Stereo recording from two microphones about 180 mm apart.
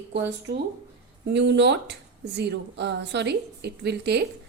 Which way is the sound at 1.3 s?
75° right (ahead or behind).